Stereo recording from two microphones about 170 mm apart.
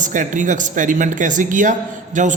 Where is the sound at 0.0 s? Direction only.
50° right (ahead or behind).